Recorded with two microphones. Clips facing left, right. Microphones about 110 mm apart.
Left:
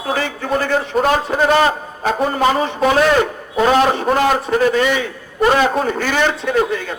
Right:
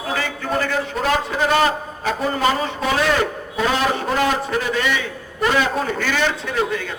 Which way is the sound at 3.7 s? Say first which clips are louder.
Left 6 dB; 45° left (ahead or behind).